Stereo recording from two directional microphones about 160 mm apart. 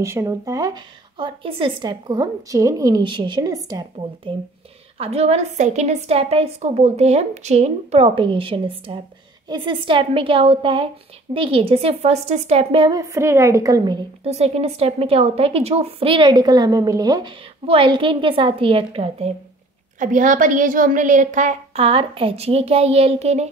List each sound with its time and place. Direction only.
0.0 s a woman's voice: 20° right (ahead or behind)
4.9 s a woman's voice: 40° right (ahead or behind)
13.0 s a woman's voice: 20° right (ahead or behind)
14.2 s a woman's voice: 40° right (ahead or behind)
20.0 s a woman's voice: 55° right (ahead or behind)